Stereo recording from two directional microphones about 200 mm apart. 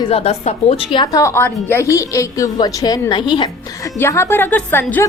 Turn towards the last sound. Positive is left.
turn(degrees=10)  # may be behind; listen again after turning